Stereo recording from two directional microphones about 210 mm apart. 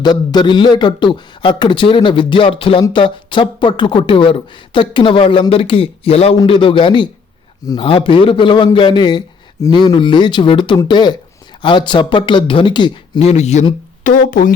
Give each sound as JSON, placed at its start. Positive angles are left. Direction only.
{"t": 0.0, "sound": "a man's voice", "side_deg": 20}